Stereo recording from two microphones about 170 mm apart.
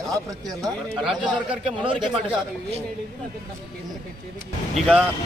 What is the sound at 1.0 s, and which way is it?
Speech, centre (ahead or behind).